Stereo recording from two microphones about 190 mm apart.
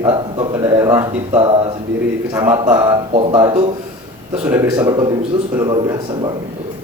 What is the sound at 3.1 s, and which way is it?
Speech, 30° right (ahead or behind).